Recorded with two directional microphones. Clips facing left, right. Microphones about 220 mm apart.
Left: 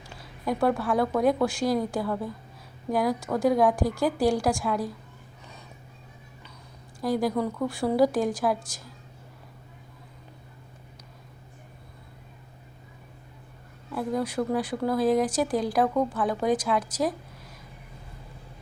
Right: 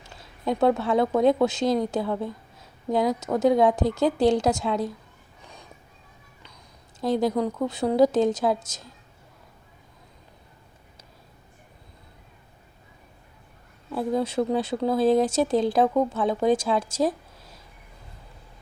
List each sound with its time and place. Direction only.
0.0 s speech: 25° right (ahead or behind)
7.0 s speech: 20° right (ahead or behind)
13.9 s speech: 25° right (ahead or behind)